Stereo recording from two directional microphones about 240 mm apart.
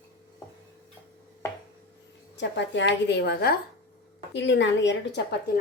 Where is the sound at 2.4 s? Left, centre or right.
Left.